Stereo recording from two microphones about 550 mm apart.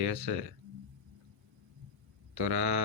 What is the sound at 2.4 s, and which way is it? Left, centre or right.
Speech, right.